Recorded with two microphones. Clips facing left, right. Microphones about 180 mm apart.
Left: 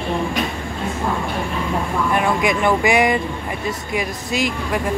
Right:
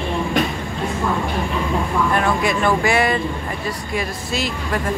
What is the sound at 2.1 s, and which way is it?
Speech, 15° left (ahead or behind).